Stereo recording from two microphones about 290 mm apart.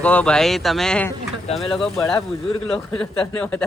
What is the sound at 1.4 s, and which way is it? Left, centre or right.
Speech, left.